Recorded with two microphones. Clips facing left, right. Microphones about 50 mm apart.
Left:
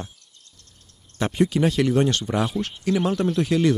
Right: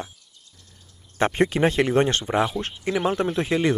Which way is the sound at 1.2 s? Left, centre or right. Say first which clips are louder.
Right 1 dB; right.